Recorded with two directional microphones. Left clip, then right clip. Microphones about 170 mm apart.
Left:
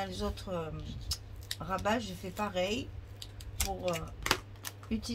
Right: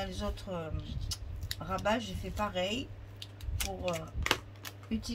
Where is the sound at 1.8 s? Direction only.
35° left (ahead or behind).